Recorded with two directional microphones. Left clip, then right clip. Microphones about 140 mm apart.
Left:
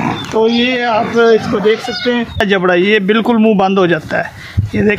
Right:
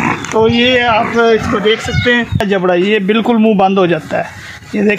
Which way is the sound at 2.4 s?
10° right (ahead or behind).